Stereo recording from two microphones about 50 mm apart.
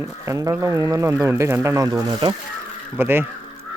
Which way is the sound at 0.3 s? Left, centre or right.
Right.